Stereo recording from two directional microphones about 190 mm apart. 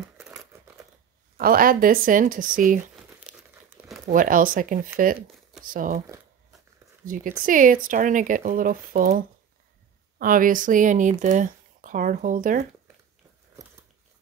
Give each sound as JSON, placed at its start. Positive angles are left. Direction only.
{"t": 1.4, "sound": "speech", "side_deg": -50}
{"t": 3.3, "sound": "crumpling", "side_deg": -5}
{"t": 4.1, "sound": "speech", "side_deg": -45}
{"t": 7.4, "sound": "speech", "side_deg": -45}